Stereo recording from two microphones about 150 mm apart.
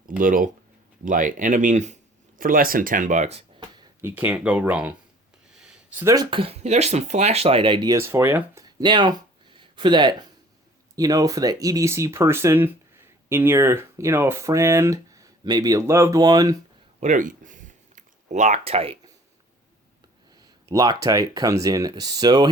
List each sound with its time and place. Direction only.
0.2 s speech: 65° right (ahead or behind)
2.4 s speech: 70° right (ahead or behind); by 3.4 s 50° right (ahead or behind)
4.0 s speech: 10° right (ahead or behind)
6.0 s speech: 20° right (ahead or behind)
6.3 s speech: 40° right (ahead or behind)
7.9 s speech: 15° right (ahead or behind)
8.6 s speech: 30° right (ahead or behind)
17.0 s speech: 60° right (ahead or behind); by 18.9 s 40° right (ahead or behind)
20.3 s speech: 25° right (ahead or behind)